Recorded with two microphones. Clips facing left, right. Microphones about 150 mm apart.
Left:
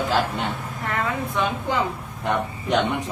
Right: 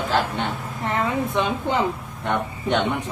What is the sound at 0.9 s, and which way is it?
Speech, 25° right (ahead or behind).